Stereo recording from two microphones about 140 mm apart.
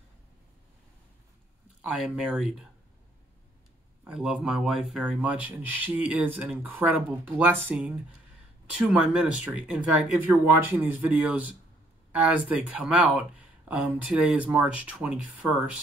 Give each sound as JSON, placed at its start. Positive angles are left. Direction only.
{"t": 1.8, "sound": "speech", "side_deg": -5}
{"t": 4.0, "sound": "speech", "side_deg": -5}